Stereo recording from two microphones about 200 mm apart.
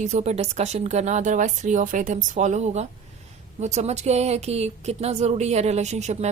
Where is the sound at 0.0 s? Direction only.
35° right (ahead or behind).